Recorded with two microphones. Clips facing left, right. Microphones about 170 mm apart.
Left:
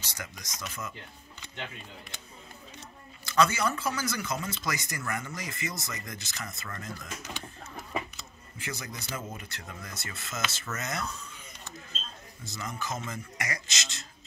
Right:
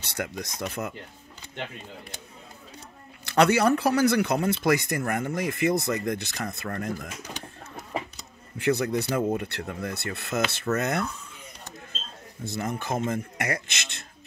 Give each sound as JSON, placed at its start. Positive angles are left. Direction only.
{"t": 0.0, "sound": "speech", "side_deg": -60}
{"t": 3.3, "sound": "speech", "side_deg": -65}
{"t": 8.5, "sound": "speech", "side_deg": -60}
{"t": 12.4, "sound": "speech", "side_deg": -55}